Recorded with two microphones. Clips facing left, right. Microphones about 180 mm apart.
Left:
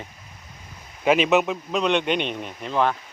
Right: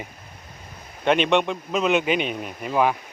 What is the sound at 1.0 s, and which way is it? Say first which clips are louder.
Speech: left 1 dB; 5° left (ahead or behind).